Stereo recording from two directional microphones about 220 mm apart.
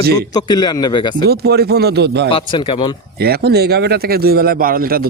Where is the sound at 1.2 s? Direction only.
45° right (ahead or behind).